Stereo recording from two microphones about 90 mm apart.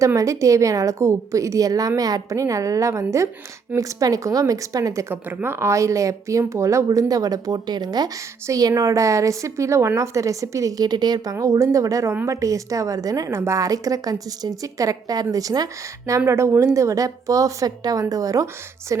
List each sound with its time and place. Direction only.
0.0 s a woman's voice: 35° right (ahead or behind)
5.1 s a woman's voice: 25° right (ahead or behind); by 8.1 s 50° right (ahead or behind)
8.4 s a woman's voice: 40° right (ahead or behind)
11.3 s a woman's voice: 35° right (ahead or behind)